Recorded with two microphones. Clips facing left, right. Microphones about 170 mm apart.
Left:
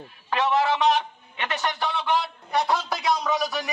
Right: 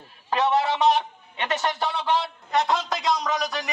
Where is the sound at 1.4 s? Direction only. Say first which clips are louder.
Right 2 dB; 30° right (ahead or behind).